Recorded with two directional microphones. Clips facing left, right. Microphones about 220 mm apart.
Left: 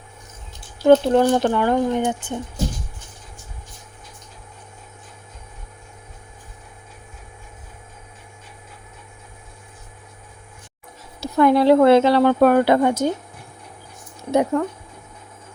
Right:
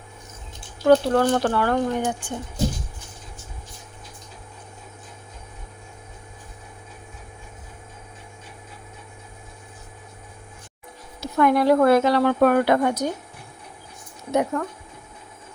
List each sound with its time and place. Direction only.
0.9 s speech: 20° left (ahead or behind)
11.2 s speech: 30° left (ahead or behind)
14.3 s speech: 30° left (ahead or behind)